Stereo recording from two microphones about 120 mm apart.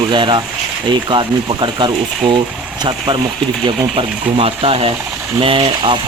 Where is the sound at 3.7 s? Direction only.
50° right (ahead or behind).